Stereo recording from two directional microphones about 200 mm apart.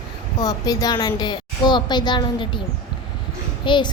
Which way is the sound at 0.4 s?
20° left (ahead or behind).